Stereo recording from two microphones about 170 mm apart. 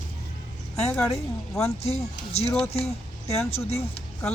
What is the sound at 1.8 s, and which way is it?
Speech, 40° left (ahead or behind).